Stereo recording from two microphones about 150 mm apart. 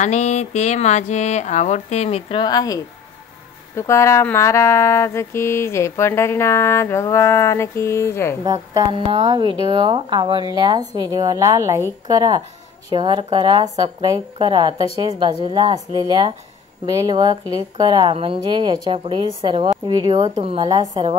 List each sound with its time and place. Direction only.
0.0 s speech: 50° left (ahead or behind); by 2.8 s 25° left (ahead or behind)
3.7 s mantra: 20° left (ahead or behind)
9.1 s a woman's voice: 30° right (ahead or behind)